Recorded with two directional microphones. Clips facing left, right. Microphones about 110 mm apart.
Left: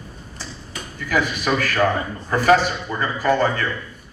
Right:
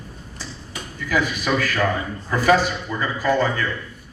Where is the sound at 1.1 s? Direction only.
50° left (ahead or behind).